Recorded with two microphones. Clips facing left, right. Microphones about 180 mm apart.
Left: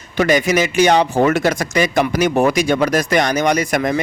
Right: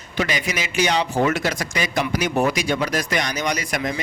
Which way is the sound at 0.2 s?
45° left (ahead or behind).